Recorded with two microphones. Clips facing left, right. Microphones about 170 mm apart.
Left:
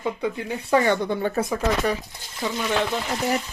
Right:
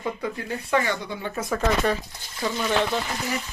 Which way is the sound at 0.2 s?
15° left (ahead or behind).